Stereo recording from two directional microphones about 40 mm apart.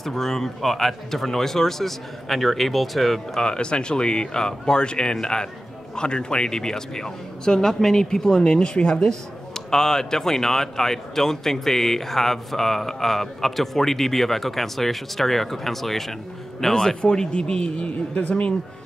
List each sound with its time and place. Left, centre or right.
0.0 s speech: centre
3.3 s speech: left